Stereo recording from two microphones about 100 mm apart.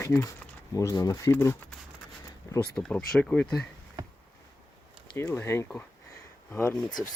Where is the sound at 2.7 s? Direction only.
10° left (ahead or behind).